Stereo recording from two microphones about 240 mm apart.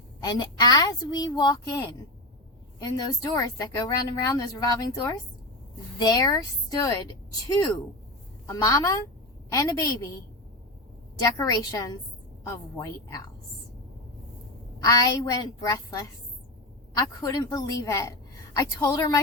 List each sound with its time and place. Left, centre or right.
0.2 s speech: centre
8.4 s speech: centre
11.2 s speech: centre
14.8 s speech: centre